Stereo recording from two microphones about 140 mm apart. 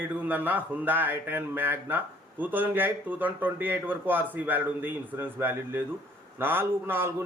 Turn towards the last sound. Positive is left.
turn(degrees=-15)  # may be behind; listen again after turning